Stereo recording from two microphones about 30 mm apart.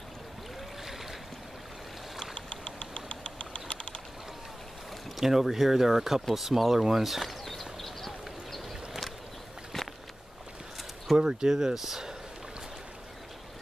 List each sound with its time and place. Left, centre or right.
2.3 s typing: left
5.1 s speech: centre
6.3 s a sound: centre
9.7 s a sound: centre
11.1 s speech: right
11.5 s speech: centre